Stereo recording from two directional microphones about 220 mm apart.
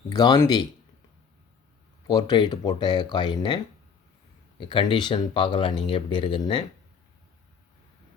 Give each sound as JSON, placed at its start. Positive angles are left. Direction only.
{"t": 0.1, "sound": "speech", "side_deg": 15}
{"t": 2.0, "sound": "speech", "side_deg": 20}
{"t": 4.7, "sound": "speech", "side_deg": 20}